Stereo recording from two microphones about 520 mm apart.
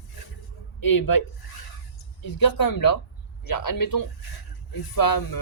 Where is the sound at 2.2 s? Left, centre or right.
Left.